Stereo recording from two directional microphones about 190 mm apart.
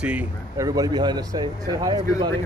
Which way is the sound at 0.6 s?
20° right (ahead or behind).